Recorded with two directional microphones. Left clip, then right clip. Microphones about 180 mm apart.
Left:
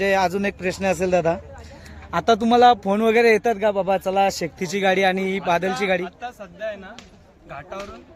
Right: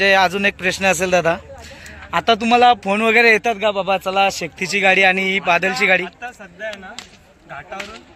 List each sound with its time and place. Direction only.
0.0 s speech: 10° left (ahead or behind)